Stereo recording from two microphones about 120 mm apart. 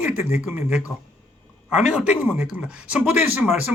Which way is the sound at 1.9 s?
10° right (ahead or behind).